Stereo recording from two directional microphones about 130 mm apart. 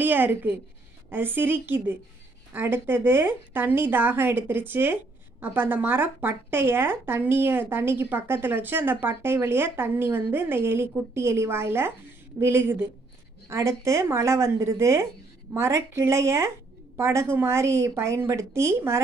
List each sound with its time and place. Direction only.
0.0 s a woman's voice: 15° right (ahead or behind)